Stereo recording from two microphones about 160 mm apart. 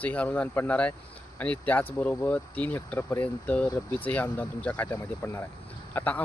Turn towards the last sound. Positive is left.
turn(degrees=10)  # may be behind; listen again after turning